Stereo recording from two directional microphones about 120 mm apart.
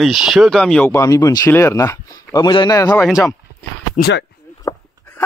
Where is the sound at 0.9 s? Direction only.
30° left (ahead or behind).